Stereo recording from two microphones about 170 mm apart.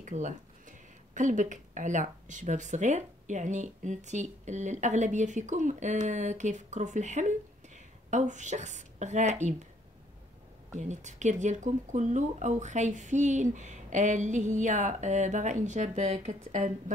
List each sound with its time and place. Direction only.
0.0 s speech: 45° right (ahead or behind)
10.8 s speech: 45° right (ahead or behind)